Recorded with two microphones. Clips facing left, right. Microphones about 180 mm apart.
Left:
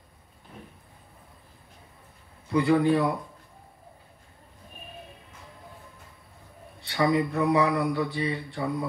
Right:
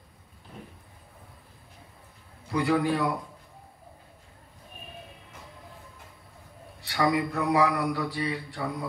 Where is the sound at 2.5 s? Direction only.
25° left (ahead or behind).